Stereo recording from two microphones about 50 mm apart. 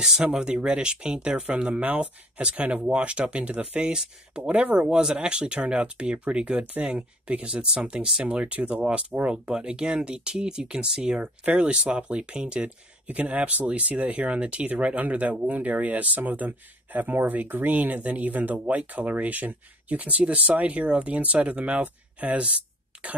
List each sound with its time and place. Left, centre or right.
0.0 s speech: centre
4.4 s speech: right
4.8 s speech: centre
11.1 s speech: right
22.9 s throat clearing: right